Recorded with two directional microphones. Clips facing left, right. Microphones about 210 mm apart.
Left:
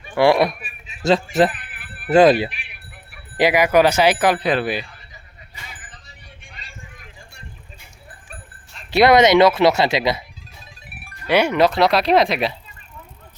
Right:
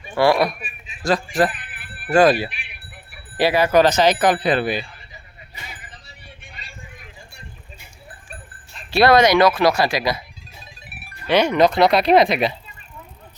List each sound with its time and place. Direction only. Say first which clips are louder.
0.2 s speech: left 2 dB; 20° left (ahead or behind); by 4.9 s 5° left (ahead or behind)
8.9 s speech: left 1 dB; 20° left (ahead or behind)
11.3 s speech: even; 10° left (ahead or behind)